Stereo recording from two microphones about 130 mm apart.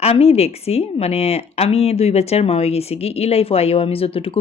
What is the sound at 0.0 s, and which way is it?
A woman's voice, 50° left (ahead or behind).